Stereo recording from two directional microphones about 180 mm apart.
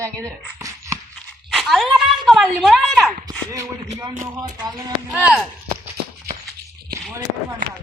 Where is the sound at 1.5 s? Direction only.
Centre (ahead or behind).